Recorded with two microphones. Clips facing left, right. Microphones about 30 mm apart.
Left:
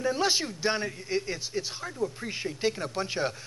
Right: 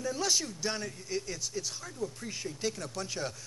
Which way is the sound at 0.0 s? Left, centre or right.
Left.